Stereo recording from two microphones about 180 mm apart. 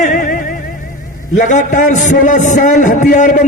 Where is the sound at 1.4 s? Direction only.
45° left (ahead or behind).